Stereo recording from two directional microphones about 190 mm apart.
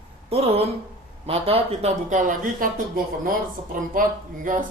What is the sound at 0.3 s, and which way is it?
Speech, 30° right (ahead or behind).